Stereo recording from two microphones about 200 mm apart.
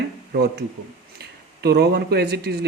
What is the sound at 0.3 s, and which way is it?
Speech, 55° right (ahead or behind).